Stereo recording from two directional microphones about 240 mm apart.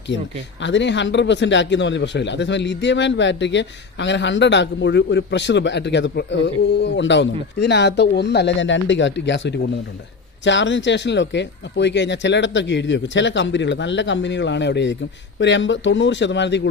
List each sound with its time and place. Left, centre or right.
0.1 s speech: left